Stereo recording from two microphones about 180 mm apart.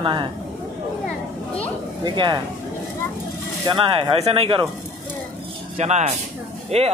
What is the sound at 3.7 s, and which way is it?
Speech, 30° right (ahead or behind).